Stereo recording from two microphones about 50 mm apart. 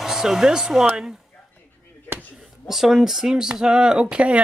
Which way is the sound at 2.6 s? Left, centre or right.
Centre.